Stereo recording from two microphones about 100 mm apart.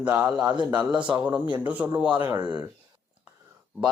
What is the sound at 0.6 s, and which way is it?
Speech, 45° right (ahead or behind).